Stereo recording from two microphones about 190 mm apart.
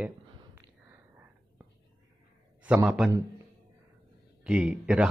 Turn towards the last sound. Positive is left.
turn(degrees=-5)  # may be behind; listen again after turning